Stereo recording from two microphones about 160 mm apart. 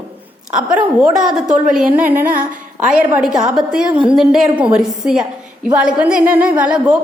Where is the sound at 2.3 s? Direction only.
55° right (ahead or behind).